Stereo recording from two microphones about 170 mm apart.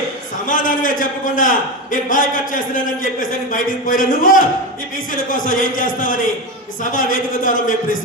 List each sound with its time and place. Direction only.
0.4 s a man's voice: 50° left (ahead or behind)